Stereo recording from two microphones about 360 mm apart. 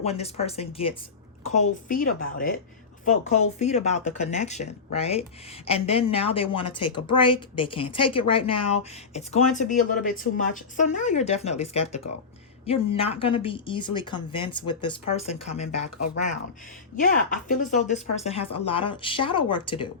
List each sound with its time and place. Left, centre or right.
0.0 s a woman's voice: centre
17.0 s speech: left